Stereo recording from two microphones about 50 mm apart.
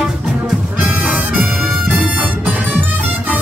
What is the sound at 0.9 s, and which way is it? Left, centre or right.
Music, right.